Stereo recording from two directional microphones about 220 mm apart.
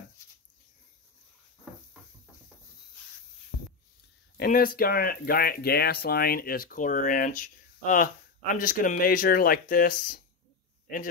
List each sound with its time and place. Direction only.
4.4 s speech: 40° left (ahead or behind)